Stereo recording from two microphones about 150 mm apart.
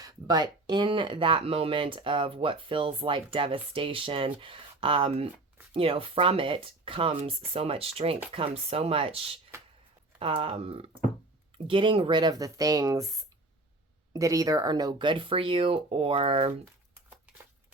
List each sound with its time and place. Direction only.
0.0 s speech: 25° right (ahead or behind)
14.1 s speech: 25° right (ahead or behind); by 16.5 s 40° right (ahead or behind)